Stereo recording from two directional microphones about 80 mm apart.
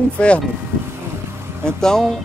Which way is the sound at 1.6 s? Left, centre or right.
Centre.